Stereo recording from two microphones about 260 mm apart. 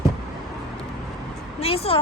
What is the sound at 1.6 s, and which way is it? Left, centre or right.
Speech, left.